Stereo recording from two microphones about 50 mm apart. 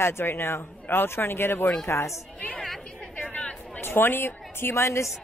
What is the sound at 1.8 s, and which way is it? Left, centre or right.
Speech, left.